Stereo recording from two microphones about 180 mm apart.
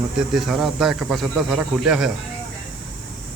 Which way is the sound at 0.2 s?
Centre (ahead or behind).